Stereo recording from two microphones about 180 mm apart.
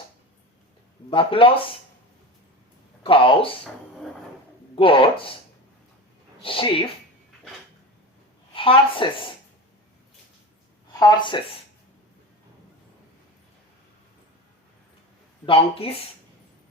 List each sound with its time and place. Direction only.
1.1 s a woman's voice: 30° left (ahead or behind)
3.0 s a woman's voice: 30° left (ahead or behind)
4.7 s a woman's voice: 30° left (ahead or behind)
6.4 s a woman's voice: 30° left (ahead or behind)
8.5 s a woman's voice: 30° left (ahead or behind)
11.0 s a woman's voice: 25° left (ahead or behind)
15.4 s speech: 30° left (ahead or behind)